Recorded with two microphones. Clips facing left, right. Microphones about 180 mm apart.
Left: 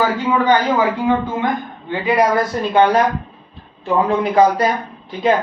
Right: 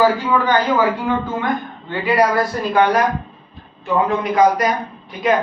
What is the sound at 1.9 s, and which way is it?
Speech, 20° left (ahead or behind).